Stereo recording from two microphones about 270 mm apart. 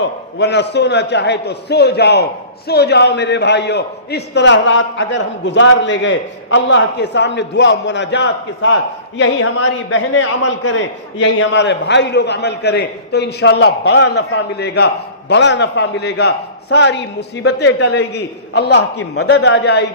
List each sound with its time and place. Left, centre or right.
0.3 s a man's voice: left